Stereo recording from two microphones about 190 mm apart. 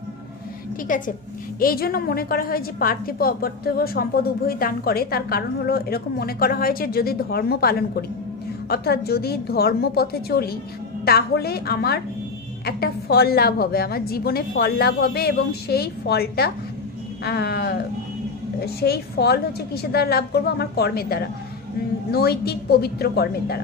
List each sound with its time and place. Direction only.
0.8 s a woman's voice: 45° left (ahead or behind)
18.8 s a woman's voice: 55° left (ahead or behind)